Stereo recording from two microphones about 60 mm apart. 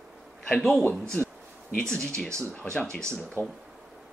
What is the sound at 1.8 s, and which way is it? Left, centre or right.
Speech, centre.